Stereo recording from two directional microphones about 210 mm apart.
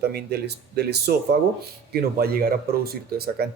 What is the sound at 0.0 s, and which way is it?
Speech, 50° right (ahead or behind).